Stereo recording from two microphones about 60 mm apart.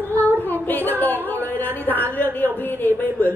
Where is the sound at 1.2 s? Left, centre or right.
Left.